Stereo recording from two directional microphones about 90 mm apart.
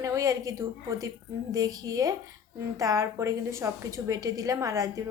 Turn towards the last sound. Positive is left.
turn(degrees=-40)  # may be behind; listen again after turning